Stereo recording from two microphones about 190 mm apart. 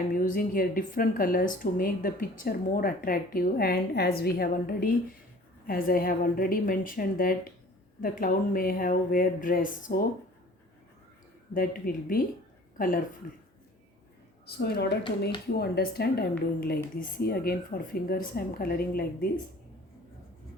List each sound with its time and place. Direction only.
0.1 s a woman's voice: 45° left (ahead or behind)
11.5 s a woman's voice: 50° left (ahead or behind)
14.4 s a woman's voice: 60° left (ahead or behind)